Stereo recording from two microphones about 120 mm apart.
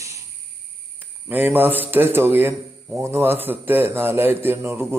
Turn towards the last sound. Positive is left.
turn(degrees=-20)  # may be behind; listen again after turning